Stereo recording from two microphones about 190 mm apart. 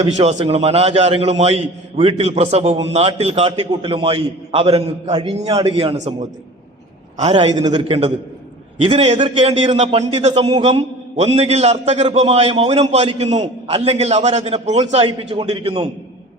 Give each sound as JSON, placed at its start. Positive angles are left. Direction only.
{"t": 0.0, "sound": "a man's voice", "side_deg": -35}
{"t": 7.5, "sound": "a man's voice", "side_deg": -20}